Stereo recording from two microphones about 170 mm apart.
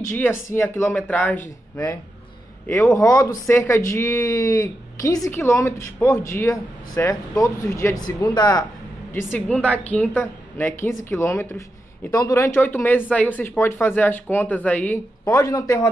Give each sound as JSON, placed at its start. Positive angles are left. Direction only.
{"t": 0.1, "sound": "speech", "side_deg": 15}
{"t": 2.7, "sound": "a man's voice", "side_deg": 20}
{"t": 9.1, "sound": "a man's voice", "side_deg": 10}